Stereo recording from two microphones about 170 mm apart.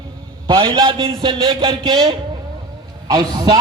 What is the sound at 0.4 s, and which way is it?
Speech, 30° right (ahead or behind).